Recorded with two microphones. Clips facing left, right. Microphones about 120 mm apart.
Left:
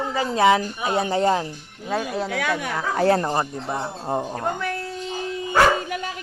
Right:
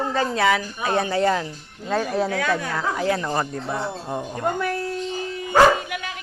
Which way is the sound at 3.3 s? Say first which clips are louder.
Even; 20° left (ahead or behind).